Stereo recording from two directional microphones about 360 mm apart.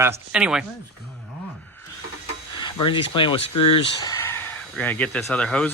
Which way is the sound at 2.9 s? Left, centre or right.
Centre.